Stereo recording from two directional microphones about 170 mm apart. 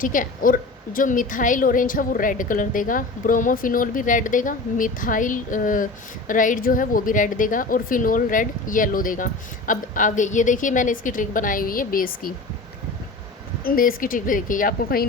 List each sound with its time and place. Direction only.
0.0 s a woman's voice: 50° left (ahead or behind)
13.7 s a woman's voice: 55° left (ahead or behind)